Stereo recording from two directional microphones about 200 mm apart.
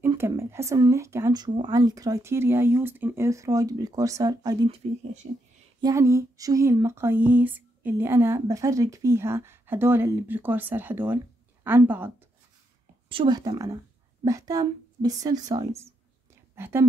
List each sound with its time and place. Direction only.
0.0 s speech: 15° right (ahead or behind)
5.8 s speech: 15° right (ahead or behind)
13.1 s a woman's voice: 25° right (ahead or behind)